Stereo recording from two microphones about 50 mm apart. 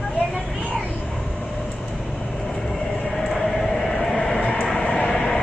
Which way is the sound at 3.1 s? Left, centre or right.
Centre.